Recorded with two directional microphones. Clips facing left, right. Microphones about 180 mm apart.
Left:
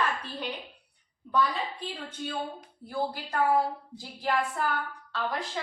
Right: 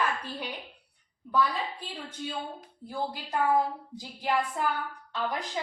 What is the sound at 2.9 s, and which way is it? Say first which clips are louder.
A woman's voice: left 1 dB; 15° right (ahead or behind).